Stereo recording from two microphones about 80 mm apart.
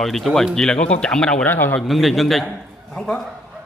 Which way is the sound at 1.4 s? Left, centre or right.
Left.